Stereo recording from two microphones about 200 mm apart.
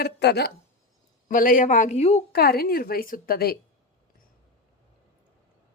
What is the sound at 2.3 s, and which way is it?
Speech, 50° left (ahead or behind).